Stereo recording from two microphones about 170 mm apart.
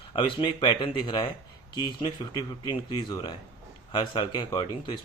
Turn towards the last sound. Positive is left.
turn(degrees=25)  # may be behind; listen again after turning